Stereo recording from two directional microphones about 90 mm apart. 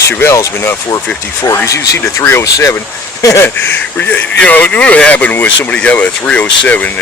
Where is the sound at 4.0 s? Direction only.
20° left (ahead or behind).